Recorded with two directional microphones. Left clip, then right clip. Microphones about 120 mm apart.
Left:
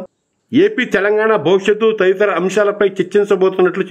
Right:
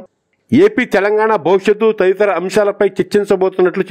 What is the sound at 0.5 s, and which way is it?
A man's voice, 50° right (ahead or behind).